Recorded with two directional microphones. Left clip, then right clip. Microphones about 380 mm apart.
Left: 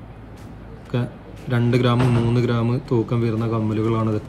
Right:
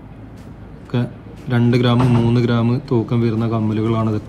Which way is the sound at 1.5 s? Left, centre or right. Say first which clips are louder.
Right 3 dB; centre.